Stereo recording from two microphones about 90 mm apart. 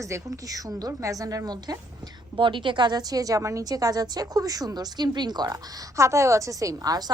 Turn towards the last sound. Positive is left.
turn(degrees=-45)  # may be behind; listen again after turning